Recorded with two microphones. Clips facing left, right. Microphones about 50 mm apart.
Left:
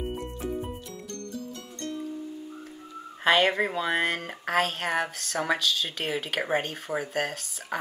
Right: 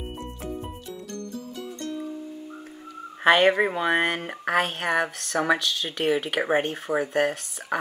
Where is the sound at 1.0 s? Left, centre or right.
Centre.